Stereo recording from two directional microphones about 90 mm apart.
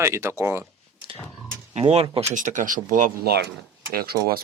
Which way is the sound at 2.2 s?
90° right.